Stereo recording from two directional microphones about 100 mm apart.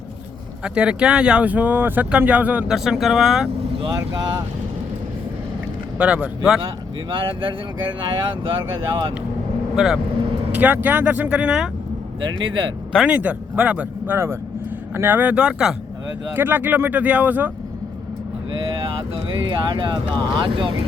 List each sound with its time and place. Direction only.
0.6 s speech: 10° right (ahead or behind)
2.6 s speech: 5° right (ahead or behind)
4.1 s speech: 40° right (ahead or behind)
6.0 s speech: 10° right (ahead or behind)
7.1 s speech: 55° right (ahead or behind)
9.7 s speech: 5° right (ahead or behind)
10.5 s speech: 15° right (ahead or behind)
13.1 s speech: 15° right (ahead or behind)
16.3 s speech: 20° right (ahead or behind)
19.5 s speech: 55° right (ahead or behind)